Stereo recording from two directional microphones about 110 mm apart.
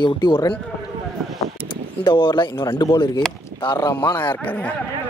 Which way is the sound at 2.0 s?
50° left (ahead or behind).